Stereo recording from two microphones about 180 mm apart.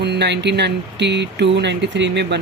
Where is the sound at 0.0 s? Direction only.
70° right (ahead or behind).